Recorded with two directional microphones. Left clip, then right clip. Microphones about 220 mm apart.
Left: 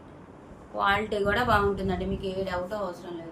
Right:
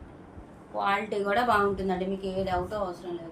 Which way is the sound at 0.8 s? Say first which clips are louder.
Left 2 dB; 15° left (ahead or behind).